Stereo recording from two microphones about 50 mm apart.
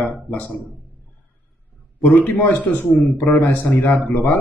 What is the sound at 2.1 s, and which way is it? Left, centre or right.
A man's voice, left.